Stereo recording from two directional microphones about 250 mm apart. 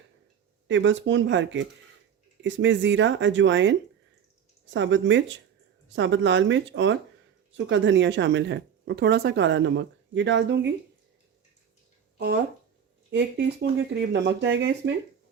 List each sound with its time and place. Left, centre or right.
0.7 s speech: right
13.1 s speech: right